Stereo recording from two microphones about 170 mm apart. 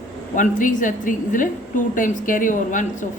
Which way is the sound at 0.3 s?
50° left (ahead or behind).